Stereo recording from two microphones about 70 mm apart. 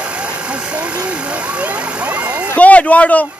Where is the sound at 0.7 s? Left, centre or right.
Centre.